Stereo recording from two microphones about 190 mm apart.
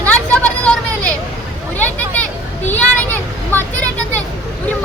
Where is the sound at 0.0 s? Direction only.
10° left (ahead or behind).